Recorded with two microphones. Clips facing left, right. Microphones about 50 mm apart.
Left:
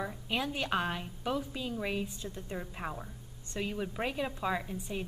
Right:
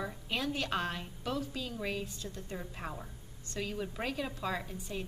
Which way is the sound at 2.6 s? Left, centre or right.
Centre.